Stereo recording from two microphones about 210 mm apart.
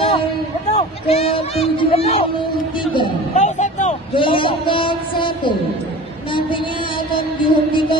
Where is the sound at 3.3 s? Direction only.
35° left (ahead or behind).